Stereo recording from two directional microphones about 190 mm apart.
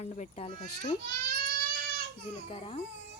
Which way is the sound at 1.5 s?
50° right (ahead or behind).